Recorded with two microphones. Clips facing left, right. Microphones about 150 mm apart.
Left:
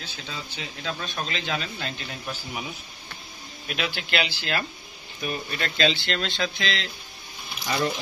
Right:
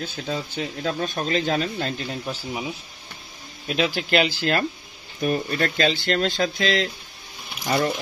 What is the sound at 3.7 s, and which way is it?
Speech, 35° right (ahead or behind).